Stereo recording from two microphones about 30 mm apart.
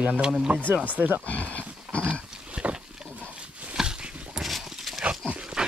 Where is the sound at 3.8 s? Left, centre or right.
Centre.